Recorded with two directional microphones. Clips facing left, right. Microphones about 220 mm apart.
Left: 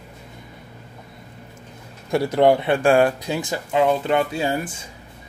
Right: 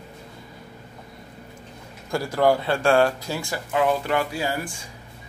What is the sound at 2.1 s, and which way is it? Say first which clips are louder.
Speech: left 4 dB; 20° left (ahead or behind).